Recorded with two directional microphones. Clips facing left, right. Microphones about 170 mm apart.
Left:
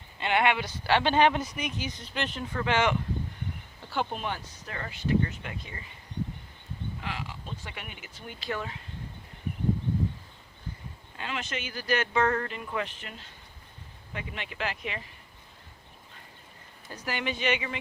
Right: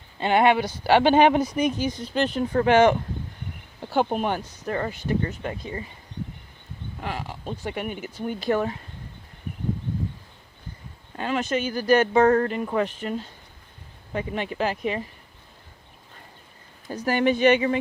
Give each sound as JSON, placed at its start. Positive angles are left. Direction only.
{"t": 0.2, "sound": "speech", "side_deg": -35}
{"t": 7.0, "sound": "speech", "side_deg": -45}
{"t": 11.2, "sound": "speech", "side_deg": -45}
{"t": 16.9, "sound": "speech", "side_deg": -45}